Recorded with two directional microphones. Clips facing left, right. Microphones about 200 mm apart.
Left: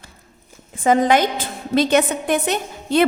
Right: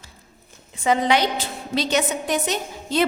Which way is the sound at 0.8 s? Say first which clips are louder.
Left 4 dB; 50° left (ahead or behind).